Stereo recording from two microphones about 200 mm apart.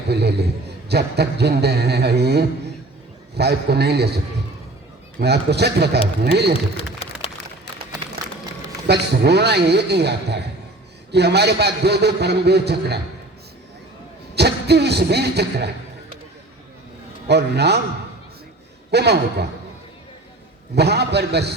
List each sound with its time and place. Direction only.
0.1 s a man's voice: 55° right (ahead or behind)
5.2 s a man's voice: 55° right (ahead or behind)
6.7 s a sound: 30° left (ahead or behind)
8.9 s a man's voice: 55° right (ahead or behind)
14.3 s a man's voice: 55° right (ahead or behind)
17.2 s a man's voice: 55° right (ahead or behind)
18.9 s a man's voice: 55° right (ahead or behind)
20.7 s a man's voice: 55° right (ahead or behind)